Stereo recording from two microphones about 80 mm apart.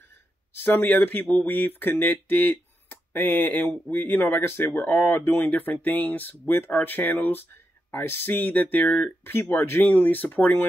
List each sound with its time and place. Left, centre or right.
0.6 s speech: left